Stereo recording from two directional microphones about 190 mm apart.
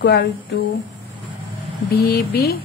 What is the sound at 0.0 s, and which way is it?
Speech, 60° left (ahead or behind).